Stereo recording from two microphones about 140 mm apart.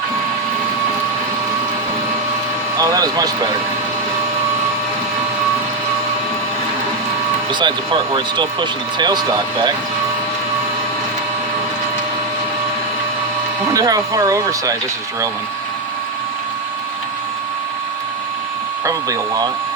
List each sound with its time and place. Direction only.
2.7 s speech: 25° right (ahead or behind)
7.6 s speech: 35° right (ahead or behind)
13.7 s speech: 25° right (ahead or behind)
18.9 s speech: 25° right (ahead or behind)